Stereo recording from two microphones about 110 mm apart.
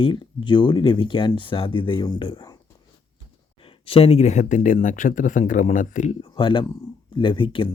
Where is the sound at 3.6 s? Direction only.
60° left (ahead or behind); by 4.5 s 90° left.